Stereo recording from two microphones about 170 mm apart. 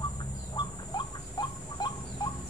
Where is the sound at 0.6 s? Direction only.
25° left (ahead or behind).